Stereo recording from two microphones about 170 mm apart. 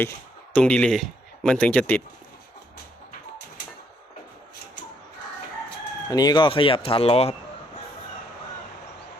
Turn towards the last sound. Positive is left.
turn(degrees=35)  # may be behind; listen again after turning